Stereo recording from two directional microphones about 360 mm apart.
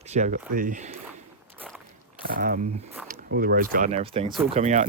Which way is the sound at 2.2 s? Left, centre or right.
Right.